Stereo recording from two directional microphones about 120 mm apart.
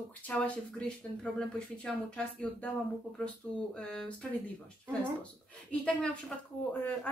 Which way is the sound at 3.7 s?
5° left (ahead or behind).